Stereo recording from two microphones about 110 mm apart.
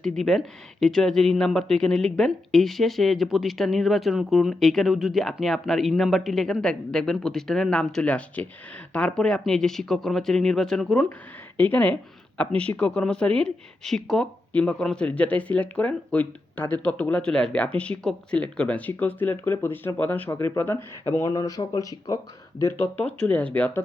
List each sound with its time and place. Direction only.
0.0 s a woman's voice: 5° left (ahead or behind)
11.5 s a woman's voice: 15° left (ahead or behind)
21.2 s speech: 35° left (ahead or behind)
22.8 s a woman's voice: 15° left (ahead or behind)